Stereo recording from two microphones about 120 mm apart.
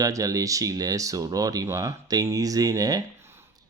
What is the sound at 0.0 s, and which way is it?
Speech, 30° right (ahead or behind).